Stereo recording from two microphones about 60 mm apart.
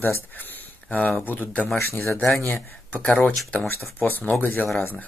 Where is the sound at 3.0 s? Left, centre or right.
Left.